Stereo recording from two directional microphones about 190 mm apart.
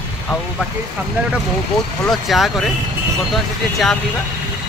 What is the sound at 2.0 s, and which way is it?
Speech, centre (ahead or behind).